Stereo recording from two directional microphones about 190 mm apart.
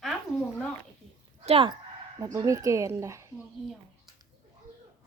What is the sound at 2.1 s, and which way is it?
Speech, 20° right (ahead or behind).